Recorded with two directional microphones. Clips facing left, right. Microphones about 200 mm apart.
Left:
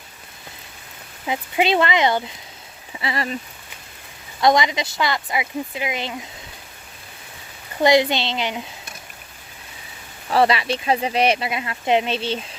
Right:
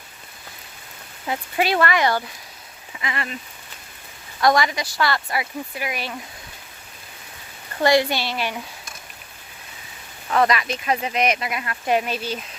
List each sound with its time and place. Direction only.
1.3 s speech: 20° left (ahead or behind)
2.9 s speech: 35° left (ahead or behind)
4.4 s speech: 20° left (ahead or behind)
7.8 s speech: 20° left (ahead or behind)
10.2 s speech: 30° left (ahead or behind)